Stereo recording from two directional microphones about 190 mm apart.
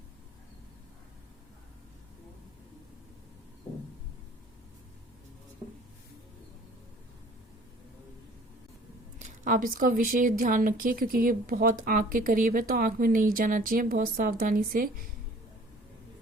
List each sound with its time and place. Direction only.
9.1 s a woman's voice: 40° right (ahead or behind)